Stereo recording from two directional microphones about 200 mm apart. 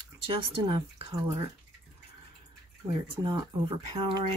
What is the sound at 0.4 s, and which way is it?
Speech, 25° right (ahead or behind).